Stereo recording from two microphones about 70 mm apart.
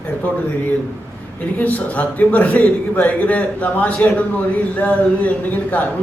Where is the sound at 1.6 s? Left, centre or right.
Left.